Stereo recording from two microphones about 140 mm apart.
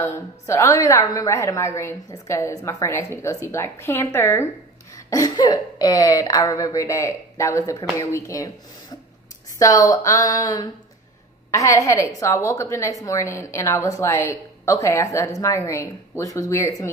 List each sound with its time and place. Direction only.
0.0 s a woman's voice: 20° left (ahead or behind)